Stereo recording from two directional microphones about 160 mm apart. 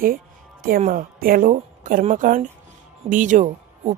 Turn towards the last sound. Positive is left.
turn(degrees=-50)  # may be behind; listen again after turning